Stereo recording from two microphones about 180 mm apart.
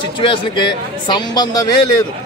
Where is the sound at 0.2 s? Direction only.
25° left (ahead or behind).